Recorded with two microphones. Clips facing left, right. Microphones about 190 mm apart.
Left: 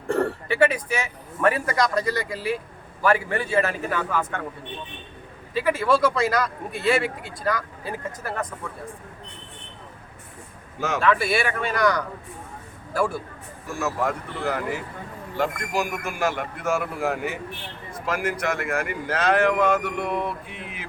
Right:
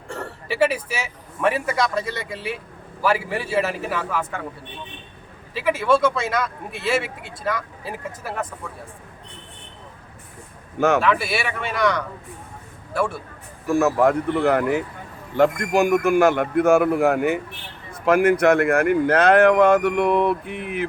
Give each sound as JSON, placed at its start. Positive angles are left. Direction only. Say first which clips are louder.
{"t": 0.4, "sound": "speech", "louder": "even", "side_deg": -5}
{"t": 5.5, "sound": "speech", "louder": "right 2 dB", "side_deg": 0}
{"t": 10.8, "sound": "speech", "louder": "right 9 dB", "side_deg": -60}
{"t": 11.0, "sound": "speech", "louder": "even", "side_deg": 0}
{"t": 13.7, "sound": "speech", "louder": "right 9 dB", "side_deg": -60}